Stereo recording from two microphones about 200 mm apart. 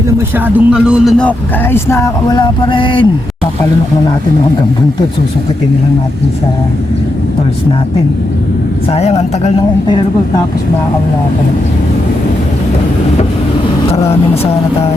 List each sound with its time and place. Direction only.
0.3 s speech: 5° right (ahead or behind)
1.7 s speech: 15° left (ahead or behind)
8.9 s a woman's voice: 30° left (ahead or behind)